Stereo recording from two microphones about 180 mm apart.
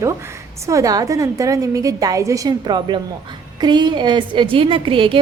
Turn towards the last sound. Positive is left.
turn(degrees=-30)  # may be behind; listen again after turning